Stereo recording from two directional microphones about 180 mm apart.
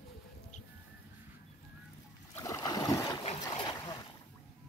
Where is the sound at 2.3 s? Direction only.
15° left (ahead or behind).